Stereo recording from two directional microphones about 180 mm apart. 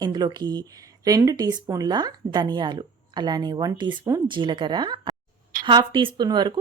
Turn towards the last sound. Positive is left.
turn(degrees=-25)  # may be behind; listen again after turning